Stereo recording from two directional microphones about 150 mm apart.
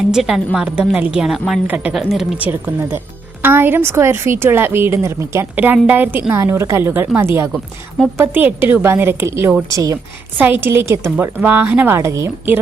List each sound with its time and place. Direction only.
0.1 s a woman's voice: 5° right (ahead or behind)
3.4 s a woman's voice: 15° right (ahead or behind)
10.3 s a woman's voice: 10° right (ahead or behind)